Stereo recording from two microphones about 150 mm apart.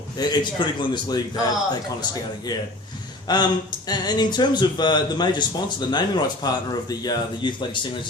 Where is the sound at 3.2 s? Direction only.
25° left (ahead or behind).